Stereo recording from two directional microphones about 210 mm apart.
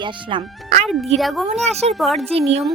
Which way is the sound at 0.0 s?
20° right (ahead or behind).